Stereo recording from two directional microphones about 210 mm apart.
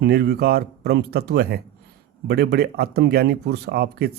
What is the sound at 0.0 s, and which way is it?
Speech, 50° right (ahead or behind).